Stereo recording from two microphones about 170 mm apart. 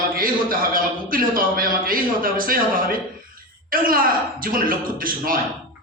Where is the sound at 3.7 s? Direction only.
55° right (ahead or behind).